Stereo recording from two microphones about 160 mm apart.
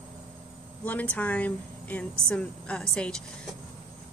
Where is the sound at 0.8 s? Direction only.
10° left (ahead or behind).